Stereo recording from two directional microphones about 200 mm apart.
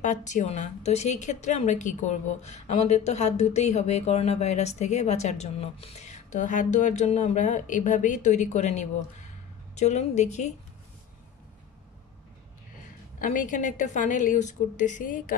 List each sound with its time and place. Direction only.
0.0 s a woman's voice: 40° left (ahead or behind)
13.2 s a woman's voice: 40° left (ahead or behind)